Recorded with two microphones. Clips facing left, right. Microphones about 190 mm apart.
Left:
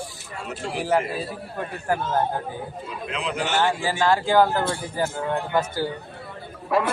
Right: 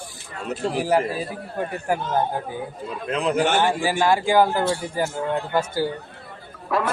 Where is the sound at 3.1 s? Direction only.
45° right (ahead or behind).